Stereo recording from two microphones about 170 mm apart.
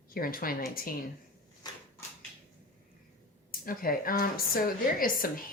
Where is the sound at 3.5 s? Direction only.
55° left (ahead or behind).